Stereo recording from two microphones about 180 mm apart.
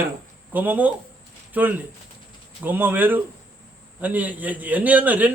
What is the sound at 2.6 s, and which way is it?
A man's voice, 10° right (ahead or behind).